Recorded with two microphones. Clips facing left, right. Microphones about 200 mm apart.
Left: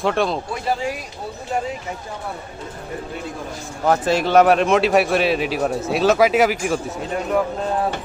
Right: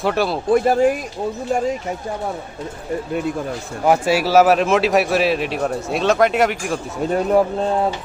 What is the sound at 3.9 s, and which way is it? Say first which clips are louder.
Speech: right 1 dB; 10° right (ahead or behind).